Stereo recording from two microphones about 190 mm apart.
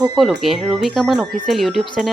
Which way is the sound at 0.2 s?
Centre (ahead or behind).